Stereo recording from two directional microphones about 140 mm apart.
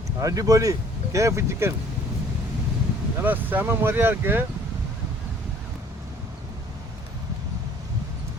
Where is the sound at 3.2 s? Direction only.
15° right (ahead or behind).